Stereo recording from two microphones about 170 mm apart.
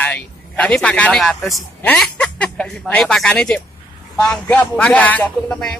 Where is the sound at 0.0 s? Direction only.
10° left (ahead or behind).